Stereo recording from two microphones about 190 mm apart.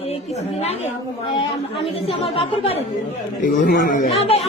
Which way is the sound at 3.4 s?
50° left (ahead or behind).